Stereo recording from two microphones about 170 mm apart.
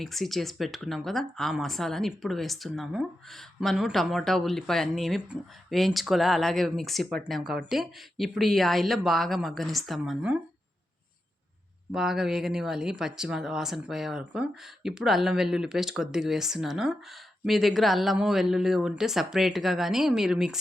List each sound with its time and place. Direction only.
0.0 s speech: centre (ahead or behind)
11.9 s speech: 5° right (ahead or behind)